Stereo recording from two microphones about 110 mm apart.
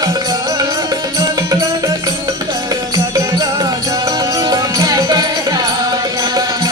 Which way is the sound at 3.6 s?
35° right (ahead or behind).